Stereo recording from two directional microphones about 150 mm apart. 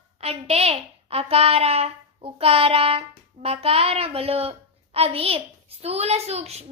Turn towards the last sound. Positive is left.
turn(degrees=-45)  # may be behind; listen again after turning